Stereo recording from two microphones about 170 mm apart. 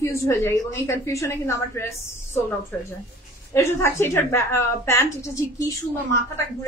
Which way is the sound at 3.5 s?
15° left (ahead or behind).